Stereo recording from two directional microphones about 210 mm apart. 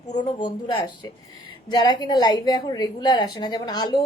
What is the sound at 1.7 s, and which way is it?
A woman's voice, 20° left (ahead or behind).